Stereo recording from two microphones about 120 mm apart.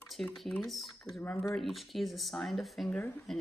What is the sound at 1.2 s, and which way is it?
Speech, 20° left (ahead or behind).